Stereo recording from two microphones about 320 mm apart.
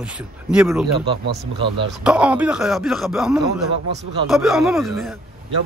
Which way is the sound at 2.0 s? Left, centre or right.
Centre.